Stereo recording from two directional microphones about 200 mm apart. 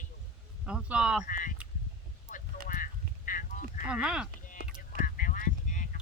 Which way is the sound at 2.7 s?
45° left (ahead or behind).